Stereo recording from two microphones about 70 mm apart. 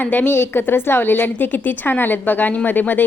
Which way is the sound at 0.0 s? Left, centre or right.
Left.